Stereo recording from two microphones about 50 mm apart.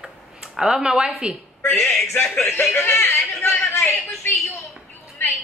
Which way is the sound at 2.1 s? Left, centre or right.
Left.